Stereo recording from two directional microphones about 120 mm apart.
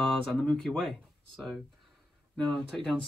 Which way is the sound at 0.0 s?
Centre (ahead or behind).